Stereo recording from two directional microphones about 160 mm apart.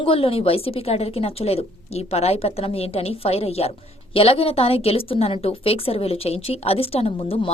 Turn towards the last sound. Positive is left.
turn(degrees=35)  # may be behind; listen again after turning